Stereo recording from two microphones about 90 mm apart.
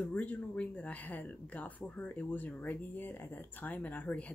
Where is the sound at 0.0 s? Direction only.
15° left (ahead or behind).